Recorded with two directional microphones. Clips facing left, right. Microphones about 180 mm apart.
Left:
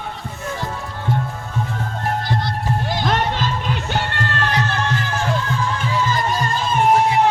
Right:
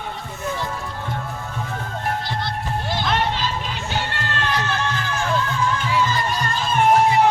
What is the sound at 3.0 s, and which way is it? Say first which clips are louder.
Music: left 2 dB; 45° left (ahead or behind).